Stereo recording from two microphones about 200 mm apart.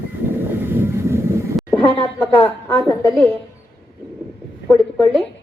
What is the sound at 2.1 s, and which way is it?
A woman's voice, 5° left (ahead or behind).